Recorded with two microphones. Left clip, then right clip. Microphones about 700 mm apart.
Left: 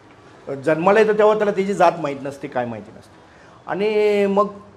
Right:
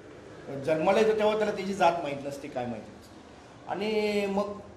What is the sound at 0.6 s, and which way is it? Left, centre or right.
A man's voice, left.